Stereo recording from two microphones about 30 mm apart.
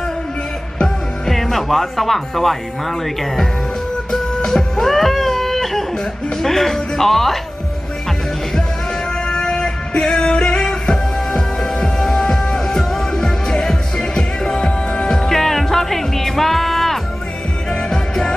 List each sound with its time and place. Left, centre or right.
0.8 s speech: centre
4.1 s music: centre
6.3 s speech: centre
9.2 s music: left
15.1 s music: centre
17.6 s music: left